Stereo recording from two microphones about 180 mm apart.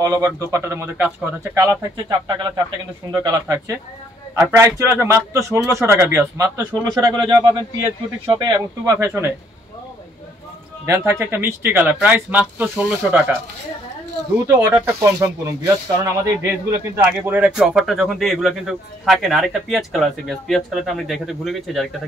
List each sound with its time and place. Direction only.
0.0 s a man's voice: 15° right (ahead or behind)
10.9 s a man's voice: 15° right (ahead or behind)
14.5 s a man's voice: 15° right (ahead or behind)
16.8 s speech: 15° right (ahead or behind)